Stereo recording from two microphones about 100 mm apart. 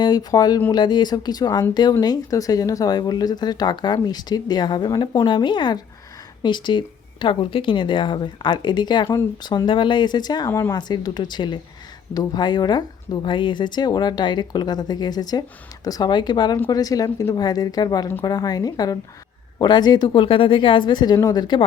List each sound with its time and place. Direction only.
0.0 s a woman's voice: 40° left (ahead or behind)
5.2 s speech: 55° left (ahead or behind)
10.5 s speech: 30° left (ahead or behind)
10.8 s a woman's voice: 45° left (ahead or behind)
20.2 s a woman's voice: 60° left (ahead or behind); by 21.6 s 45° left (ahead or behind)